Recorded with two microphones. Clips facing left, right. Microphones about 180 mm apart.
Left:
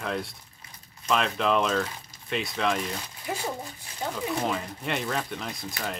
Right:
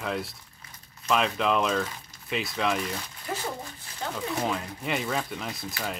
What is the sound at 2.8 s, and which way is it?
Speech, 15° left (ahead or behind).